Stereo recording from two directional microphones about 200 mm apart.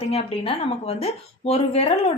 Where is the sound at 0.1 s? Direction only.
30° left (ahead or behind).